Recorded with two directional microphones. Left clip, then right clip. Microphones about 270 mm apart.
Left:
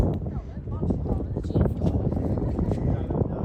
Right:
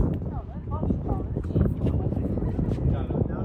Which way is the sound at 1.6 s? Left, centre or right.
Centre.